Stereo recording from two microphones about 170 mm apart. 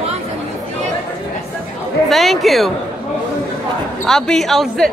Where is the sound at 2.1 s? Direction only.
Centre (ahead or behind).